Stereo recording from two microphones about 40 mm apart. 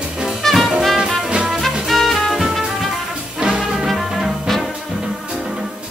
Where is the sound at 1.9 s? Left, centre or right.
Centre.